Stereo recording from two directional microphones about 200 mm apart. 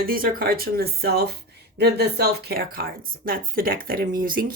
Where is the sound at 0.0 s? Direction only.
50° right (ahead or behind).